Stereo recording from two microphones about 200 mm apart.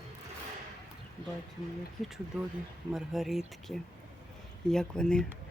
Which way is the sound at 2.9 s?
Centre (ahead or behind).